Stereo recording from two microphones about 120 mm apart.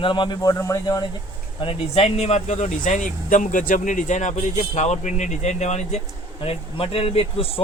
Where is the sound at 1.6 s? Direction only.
55° left (ahead or behind); by 4.3 s 90° left.